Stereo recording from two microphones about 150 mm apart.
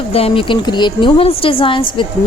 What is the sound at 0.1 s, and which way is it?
A woman's voice, 40° left (ahead or behind).